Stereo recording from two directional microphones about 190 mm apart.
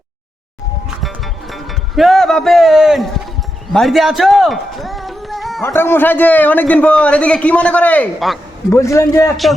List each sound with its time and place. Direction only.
0.9 s music: centre (ahead or behind)
3.7 s speech: centre (ahead or behind)
5.6 s a man's voice: 10° left (ahead or behind)
8.7 s a man's voice: 15° left (ahead or behind)